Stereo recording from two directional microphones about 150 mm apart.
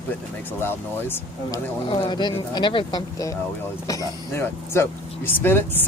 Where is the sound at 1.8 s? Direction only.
30° left (ahead or behind).